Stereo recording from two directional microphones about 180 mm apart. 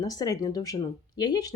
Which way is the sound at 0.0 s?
20° left (ahead or behind).